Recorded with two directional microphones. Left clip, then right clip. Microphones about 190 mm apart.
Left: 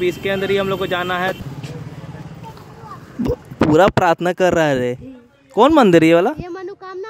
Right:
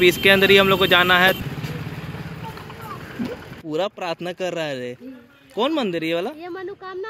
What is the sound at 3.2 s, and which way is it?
Speech, 55° left (ahead or behind).